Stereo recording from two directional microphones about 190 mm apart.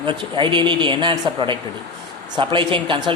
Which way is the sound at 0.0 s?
25° right (ahead or behind).